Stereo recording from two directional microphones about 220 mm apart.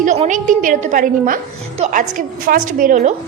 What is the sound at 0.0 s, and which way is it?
A woman's voice, 35° right (ahead or behind).